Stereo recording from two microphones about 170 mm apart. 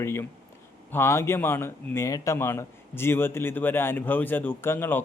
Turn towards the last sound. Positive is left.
turn(degrees=15)  # may be behind; listen again after turning